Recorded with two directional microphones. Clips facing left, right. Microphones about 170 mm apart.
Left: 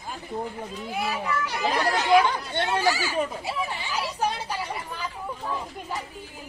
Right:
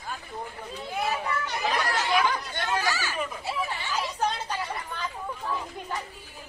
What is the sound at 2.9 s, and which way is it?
Speech, 10° left (ahead or behind).